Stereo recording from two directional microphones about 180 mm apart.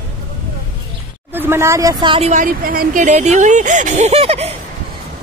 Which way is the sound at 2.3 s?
50° right (ahead or behind).